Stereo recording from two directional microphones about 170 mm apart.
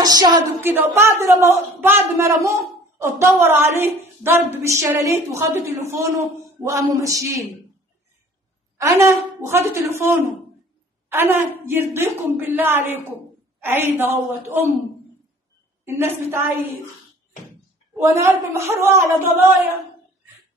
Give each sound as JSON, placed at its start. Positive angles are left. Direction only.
{"t": 0.0, "sound": "a sound", "side_deg": -25}
{"t": 0.6, "sound": "a woman's voice", "side_deg": -10}
{"t": 6.7, "sound": "a sound", "side_deg": -20}
{"t": 8.7, "sound": "a woman's voice", "side_deg": -20}
{"t": 15.8, "sound": "a woman's voice", "side_deg": -15}
{"t": 17.9, "sound": "a woman's voice", "side_deg": -15}